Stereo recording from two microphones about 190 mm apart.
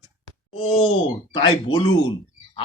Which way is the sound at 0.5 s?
30° left (ahead or behind).